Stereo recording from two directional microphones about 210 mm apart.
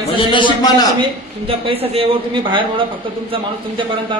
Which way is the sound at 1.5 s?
25° right (ahead or behind).